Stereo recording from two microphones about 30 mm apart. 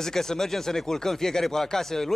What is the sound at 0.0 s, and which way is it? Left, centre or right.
A man's voice, centre.